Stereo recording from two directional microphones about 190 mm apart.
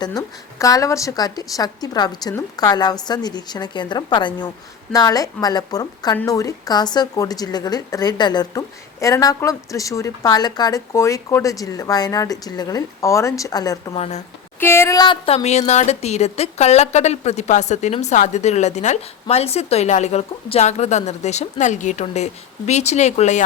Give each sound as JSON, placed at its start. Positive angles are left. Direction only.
{"t": 0.0, "sound": "a woman's voice", "side_deg": 20}
{"t": 13.9, "sound": "speech", "side_deg": 35}
{"t": 14.6, "sound": "speech", "side_deg": 15}